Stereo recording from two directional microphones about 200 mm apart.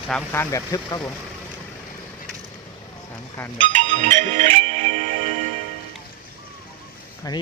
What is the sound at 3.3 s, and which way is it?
Speech, 10° left (ahead or behind).